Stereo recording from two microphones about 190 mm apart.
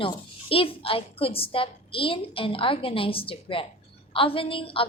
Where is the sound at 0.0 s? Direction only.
30° left (ahead or behind).